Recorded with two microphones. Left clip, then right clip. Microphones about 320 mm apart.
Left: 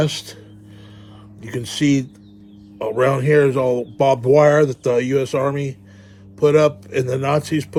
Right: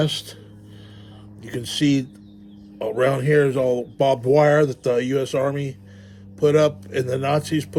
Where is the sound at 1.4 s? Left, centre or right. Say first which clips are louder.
Left 2 dB; centre.